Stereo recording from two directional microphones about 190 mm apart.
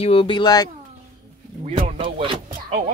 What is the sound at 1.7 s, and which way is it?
Speech, 25° right (ahead or behind).